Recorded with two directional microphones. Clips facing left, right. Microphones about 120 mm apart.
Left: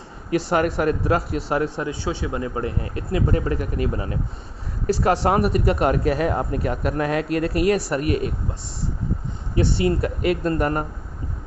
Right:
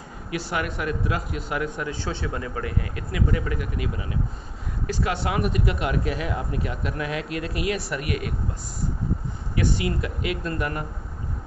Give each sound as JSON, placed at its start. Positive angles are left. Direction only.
{"t": 0.5, "sound": "speech", "side_deg": 40}
{"t": 1.9, "sound": "speech", "side_deg": 15}
{"t": 9.6, "sound": "speech", "side_deg": 35}